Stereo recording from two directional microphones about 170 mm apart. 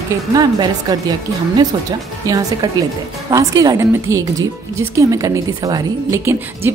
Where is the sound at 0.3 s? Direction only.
25° right (ahead or behind).